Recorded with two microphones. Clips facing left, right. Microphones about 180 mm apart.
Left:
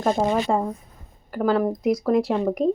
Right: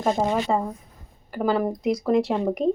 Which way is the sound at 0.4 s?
Centre (ahead or behind).